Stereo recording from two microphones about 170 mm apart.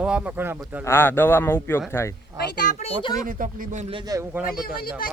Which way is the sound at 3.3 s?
55° right (ahead or behind).